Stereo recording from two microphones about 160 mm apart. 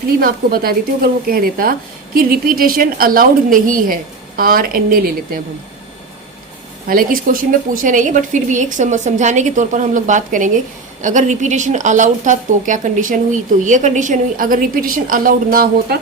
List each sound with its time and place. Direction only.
0.2 s a woman's voice: 65° right (ahead or behind)
6.8 s a woman's voice: 60° right (ahead or behind)